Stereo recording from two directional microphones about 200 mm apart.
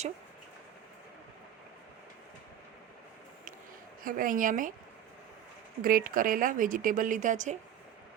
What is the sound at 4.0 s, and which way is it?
Speech, 45° right (ahead or behind).